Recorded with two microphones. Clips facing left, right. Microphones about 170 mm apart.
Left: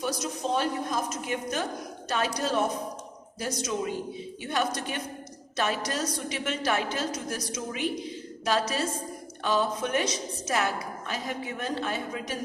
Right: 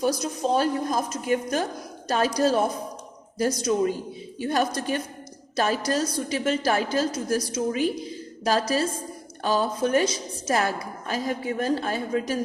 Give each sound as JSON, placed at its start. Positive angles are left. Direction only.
{"t": 0.0, "sound": "a woman's voice", "side_deg": -40}
{"t": 9.4, "sound": "a woman's voice", "side_deg": -35}